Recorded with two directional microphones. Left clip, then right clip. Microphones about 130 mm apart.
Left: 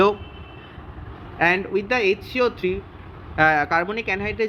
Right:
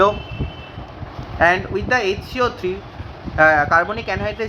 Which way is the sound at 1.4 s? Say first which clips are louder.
Right 4 dB; 30° left (ahead or behind).